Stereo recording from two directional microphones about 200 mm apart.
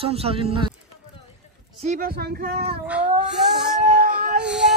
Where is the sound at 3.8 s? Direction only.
40° right (ahead or behind).